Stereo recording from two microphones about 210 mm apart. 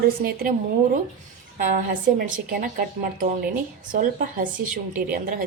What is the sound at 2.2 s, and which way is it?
Speech, 40° right (ahead or behind).